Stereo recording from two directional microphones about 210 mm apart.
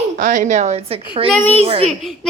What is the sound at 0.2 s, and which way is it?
A woman's voice, 35° right (ahead or behind).